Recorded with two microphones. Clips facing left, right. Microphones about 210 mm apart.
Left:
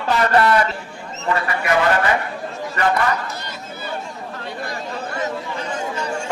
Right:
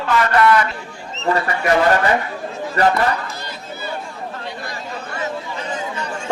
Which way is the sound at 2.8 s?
35° right (ahead or behind).